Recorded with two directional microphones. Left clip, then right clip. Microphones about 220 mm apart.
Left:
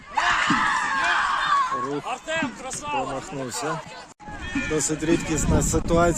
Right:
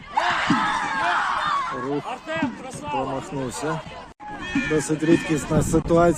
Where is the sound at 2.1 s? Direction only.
45° left (ahead or behind).